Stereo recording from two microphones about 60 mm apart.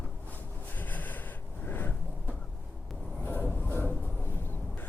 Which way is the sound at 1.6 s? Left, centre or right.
Left.